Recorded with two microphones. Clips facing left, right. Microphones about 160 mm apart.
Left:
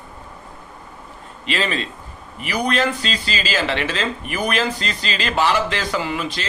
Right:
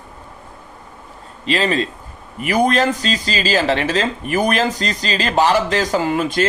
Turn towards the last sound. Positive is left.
turn(degrees=-45)  # may be behind; listen again after turning